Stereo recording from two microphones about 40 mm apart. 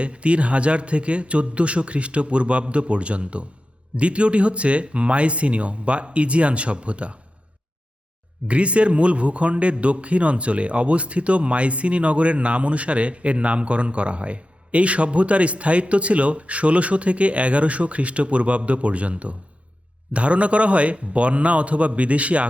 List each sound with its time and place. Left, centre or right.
0.0 s a man's voice: right
8.4 s speech: right